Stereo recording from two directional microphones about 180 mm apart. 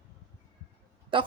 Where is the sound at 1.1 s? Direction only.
30° right (ahead or behind).